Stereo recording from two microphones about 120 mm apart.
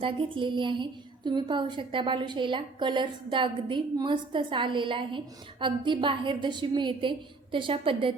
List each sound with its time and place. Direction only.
0.0 s a woman's voice: 45° right (ahead or behind)